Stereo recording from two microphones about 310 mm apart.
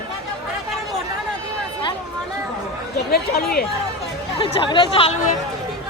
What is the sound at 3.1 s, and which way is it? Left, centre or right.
Speech, left.